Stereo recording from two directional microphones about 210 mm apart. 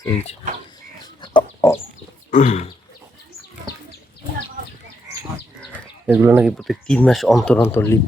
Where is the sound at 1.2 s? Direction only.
20° left (ahead or behind).